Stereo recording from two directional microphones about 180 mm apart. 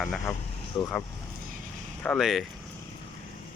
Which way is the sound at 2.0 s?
Centre (ahead or behind).